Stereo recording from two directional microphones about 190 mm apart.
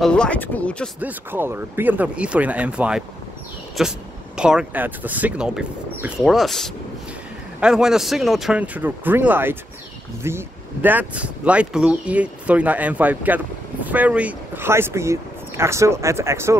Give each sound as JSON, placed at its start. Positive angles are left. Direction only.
{"t": 0.0, "sound": "speech", "side_deg": 5}
{"t": 0.9, "sound": "speech", "side_deg": -10}